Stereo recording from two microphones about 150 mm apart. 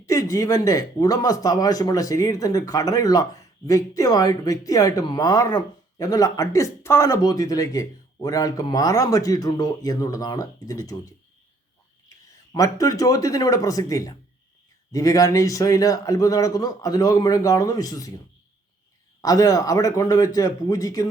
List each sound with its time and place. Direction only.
0.0 s speech: 20° left (ahead or behind)
12.5 s speech: 25° left (ahead or behind)
19.2 s speech: 25° left (ahead or behind)